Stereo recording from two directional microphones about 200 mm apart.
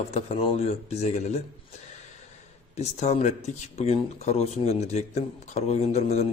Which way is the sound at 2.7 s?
30° left (ahead or behind).